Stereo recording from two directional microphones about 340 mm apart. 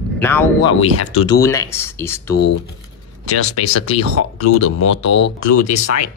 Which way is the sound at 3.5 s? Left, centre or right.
Left.